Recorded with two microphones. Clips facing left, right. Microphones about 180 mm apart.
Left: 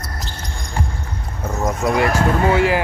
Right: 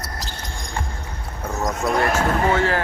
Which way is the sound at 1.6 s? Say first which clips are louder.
Left 3 dB; 10° left (ahead or behind).